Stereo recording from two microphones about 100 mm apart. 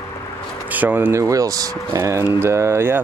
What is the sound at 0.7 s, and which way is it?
Speech, 20° right (ahead or behind).